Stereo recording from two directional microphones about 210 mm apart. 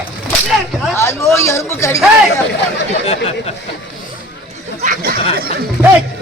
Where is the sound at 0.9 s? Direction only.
15° left (ahead or behind).